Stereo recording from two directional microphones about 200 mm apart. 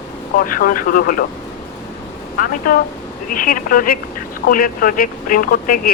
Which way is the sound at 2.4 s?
45° left (ahead or behind).